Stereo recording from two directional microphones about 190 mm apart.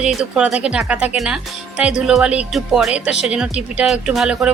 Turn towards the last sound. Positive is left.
turn(degrees=-5)  # may be behind; listen again after turning